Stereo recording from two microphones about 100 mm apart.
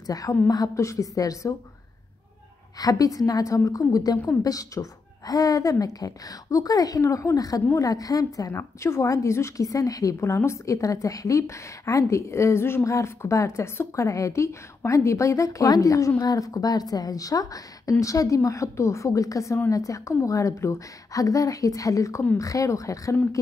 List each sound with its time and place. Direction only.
0.0 s a woman's voice: 40° left (ahead or behind)
2.8 s a woman's voice: 40° left (ahead or behind)